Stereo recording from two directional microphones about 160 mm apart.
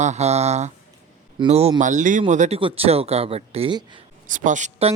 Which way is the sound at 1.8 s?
50° right (ahead or behind).